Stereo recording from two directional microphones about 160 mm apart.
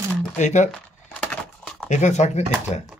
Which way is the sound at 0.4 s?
50° left (ahead or behind).